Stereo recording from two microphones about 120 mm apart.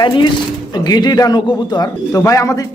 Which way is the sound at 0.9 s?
35° left (ahead or behind).